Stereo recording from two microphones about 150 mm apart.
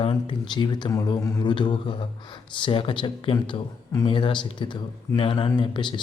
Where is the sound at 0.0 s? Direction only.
35° left (ahead or behind).